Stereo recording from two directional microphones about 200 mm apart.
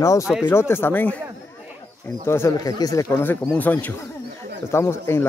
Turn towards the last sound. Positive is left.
turn(degrees=15)  # may be behind; listen again after turning